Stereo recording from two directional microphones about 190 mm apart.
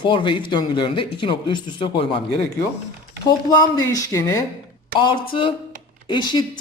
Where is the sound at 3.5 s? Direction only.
20° left (ahead or behind).